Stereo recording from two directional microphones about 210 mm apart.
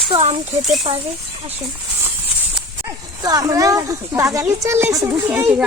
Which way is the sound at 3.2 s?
15° right (ahead or behind).